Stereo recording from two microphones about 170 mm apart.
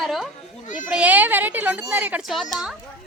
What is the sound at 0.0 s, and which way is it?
Children playing, centre (ahead or behind).